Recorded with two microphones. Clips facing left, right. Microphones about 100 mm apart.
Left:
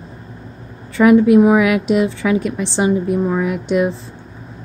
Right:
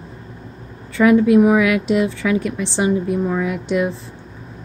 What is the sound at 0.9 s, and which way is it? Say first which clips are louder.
A woman's voice: left 2 dB; 25° left (ahead or behind).